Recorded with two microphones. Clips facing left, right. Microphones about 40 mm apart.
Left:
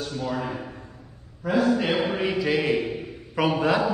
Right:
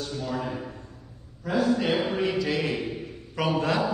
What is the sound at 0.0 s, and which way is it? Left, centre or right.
A man's voice, centre.